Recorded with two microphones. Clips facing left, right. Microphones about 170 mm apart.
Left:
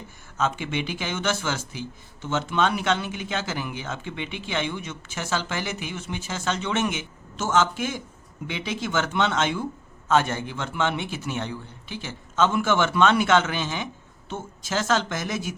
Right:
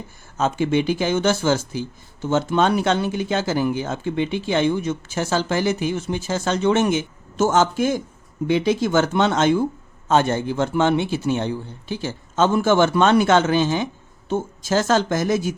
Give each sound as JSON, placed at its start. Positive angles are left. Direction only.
{"t": 0.3, "sound": "speech", "side_deg": -40}